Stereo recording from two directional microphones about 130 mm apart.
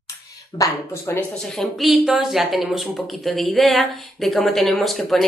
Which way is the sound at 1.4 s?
Centre (ahead or behind).